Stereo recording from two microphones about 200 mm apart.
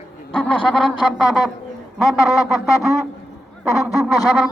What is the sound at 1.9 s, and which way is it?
Speech, centre (ahead or behind).